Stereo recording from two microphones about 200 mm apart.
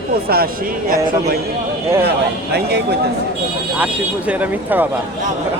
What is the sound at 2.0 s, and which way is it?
Speech, 55° right (ahead or behind).